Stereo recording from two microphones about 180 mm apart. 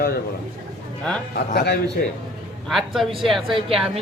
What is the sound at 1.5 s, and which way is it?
Speech, 70° left (ahead or behind).